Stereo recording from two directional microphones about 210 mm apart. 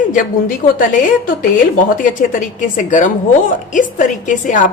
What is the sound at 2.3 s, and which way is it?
A woman's voice, 40° left (ahead or behind).